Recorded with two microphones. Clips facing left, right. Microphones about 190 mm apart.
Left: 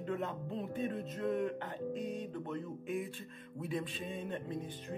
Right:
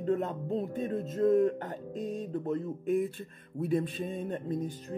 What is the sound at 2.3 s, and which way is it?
Speech, 35° right (ahead or behind).